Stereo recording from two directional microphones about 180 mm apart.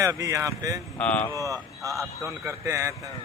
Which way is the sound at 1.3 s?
15° right (ahead or behind).